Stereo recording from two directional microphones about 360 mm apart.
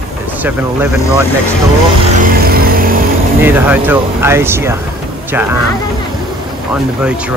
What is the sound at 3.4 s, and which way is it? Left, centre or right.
Speech, centre.